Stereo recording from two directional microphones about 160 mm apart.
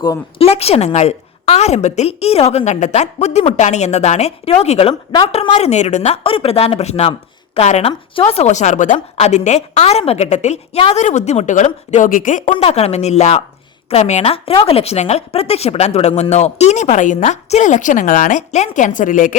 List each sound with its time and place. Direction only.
0.3 s speech: 40° left (ahead or behind); by 19.4 s 55° left (ahead or behind)